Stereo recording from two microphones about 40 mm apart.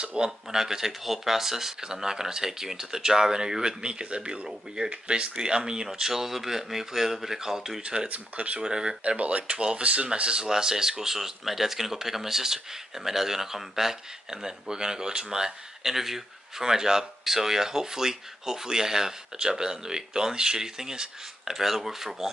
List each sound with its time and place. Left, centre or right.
0.0 s speech: right
0.5 s speech: centre
8.1 s speech: right
8.6 s speech: right
9.0 s speech: right; by 22.3 s centre